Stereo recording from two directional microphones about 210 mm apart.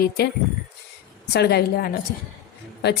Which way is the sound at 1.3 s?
50° left (ahead or behind).